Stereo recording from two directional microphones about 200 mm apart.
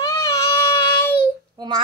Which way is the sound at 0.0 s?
15° left (ahead or behind).